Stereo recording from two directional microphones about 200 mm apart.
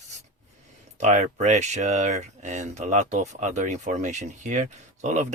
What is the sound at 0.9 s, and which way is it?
Speech, 35° right (ahead or behind).